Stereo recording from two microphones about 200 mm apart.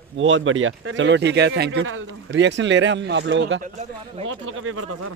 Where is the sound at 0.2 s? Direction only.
75° right (ahead or behind).